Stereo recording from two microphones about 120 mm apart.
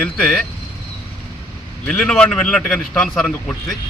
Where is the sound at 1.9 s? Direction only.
5° left (ahead or behind).